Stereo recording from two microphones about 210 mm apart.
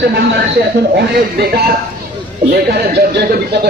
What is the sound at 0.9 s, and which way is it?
Speech, 50° right (ahead or behind).